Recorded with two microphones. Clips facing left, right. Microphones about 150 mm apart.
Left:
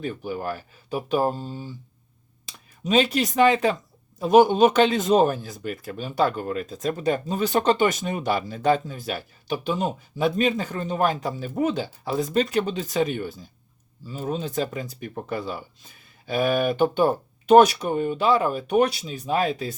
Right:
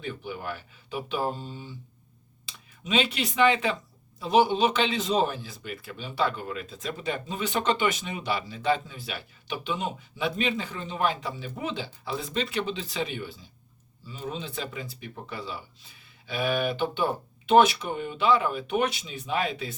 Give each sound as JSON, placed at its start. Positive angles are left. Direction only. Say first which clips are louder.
{"t": 0.0, "sound": "speech", "louder": "left 6 dB", "side_deg": 40}